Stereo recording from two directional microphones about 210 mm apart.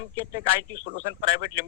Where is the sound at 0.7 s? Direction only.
20° right (ahead or behind).